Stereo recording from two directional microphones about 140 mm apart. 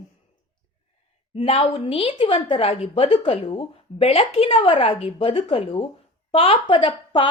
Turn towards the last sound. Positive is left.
turn(degrees=35)  # may be behind; listen again after turning